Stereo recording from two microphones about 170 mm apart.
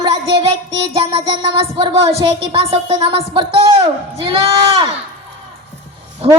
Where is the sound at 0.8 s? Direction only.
35° right (ahead or behind).